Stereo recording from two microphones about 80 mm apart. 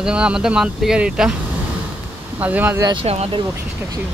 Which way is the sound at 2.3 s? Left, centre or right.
Right.